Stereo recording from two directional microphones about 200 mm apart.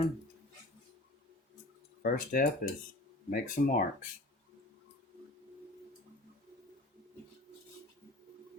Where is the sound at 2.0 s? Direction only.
45° left (ahead or behind).